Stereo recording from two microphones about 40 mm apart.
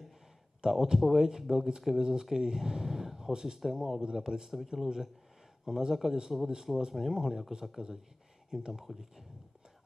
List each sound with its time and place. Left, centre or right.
0.6 s a man's voice: centre